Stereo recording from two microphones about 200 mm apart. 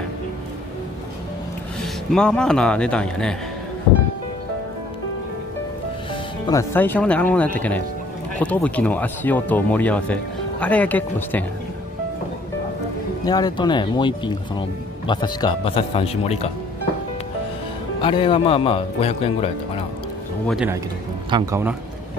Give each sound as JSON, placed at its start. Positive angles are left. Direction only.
{"t": 1.8, "sound": "a man's voice", "side_deg": 5}
{"t": 6.4, "sound": "speech", "side_deg": 15}
{"t": 13.2, "sound": "speech", "side_deg": 20}
{"t": 18.0, "sound": "speech", "side_deg": 25}
{"t": 20.4, "sound": "speech", "side_deg": -5}
{"t": 21.3, "sound": "speech", "side_deg": -25}